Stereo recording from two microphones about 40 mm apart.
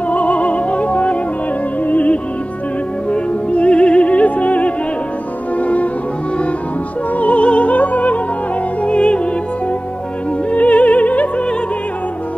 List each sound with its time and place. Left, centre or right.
0.1 s opera: left
1.9 s music: left
7.2 s music: left
8.8 s music: left